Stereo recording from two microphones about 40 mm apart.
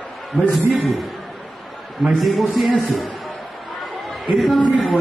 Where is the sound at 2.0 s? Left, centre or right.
Centre.